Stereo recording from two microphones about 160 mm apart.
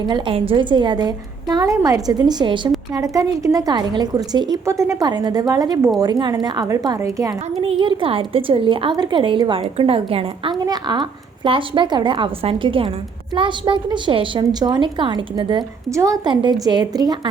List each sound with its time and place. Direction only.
0.0 s a woman's voice: 30° right (ahead or behind)
7.6 s a woman's voice: 35° right (ahead or behind)